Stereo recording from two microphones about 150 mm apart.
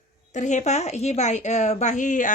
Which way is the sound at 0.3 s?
55° left (ahead or behind).